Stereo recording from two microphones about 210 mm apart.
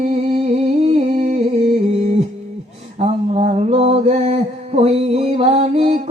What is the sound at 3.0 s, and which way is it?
Mantra, 30° right (ahead or behind).